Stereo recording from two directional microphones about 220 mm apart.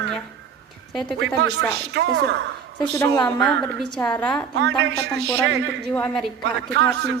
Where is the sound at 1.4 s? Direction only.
50° right (ahead or behind).